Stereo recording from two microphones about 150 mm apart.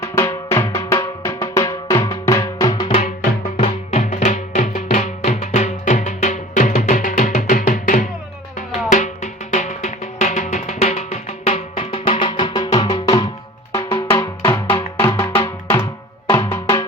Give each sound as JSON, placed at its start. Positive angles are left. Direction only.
{"t": 0.0, "sound": "music", "side_deg": 20}
{"t": 3.6, "sound": "music", "side_deg": 50}